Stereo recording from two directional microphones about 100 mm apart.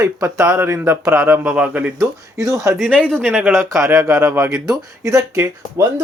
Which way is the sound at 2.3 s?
35° right (ahead or behind).